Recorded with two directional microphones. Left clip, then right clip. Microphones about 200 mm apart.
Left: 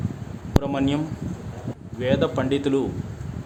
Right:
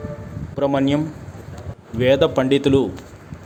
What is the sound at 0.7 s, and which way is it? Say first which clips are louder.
Speech: right 6 dB; 25° right (ahead or behind).